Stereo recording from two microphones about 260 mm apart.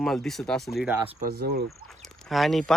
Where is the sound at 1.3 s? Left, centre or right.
Right.